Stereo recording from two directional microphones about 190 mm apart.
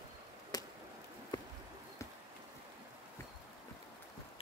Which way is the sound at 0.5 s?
20° left (ahead or behind).